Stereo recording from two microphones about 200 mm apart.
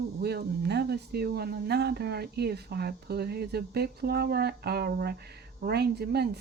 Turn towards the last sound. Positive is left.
turn(degrees=-55)  # may be behind; listen again after turning